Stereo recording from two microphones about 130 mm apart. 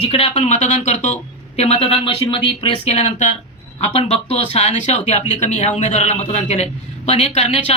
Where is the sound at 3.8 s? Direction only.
50° left (ahead or behind).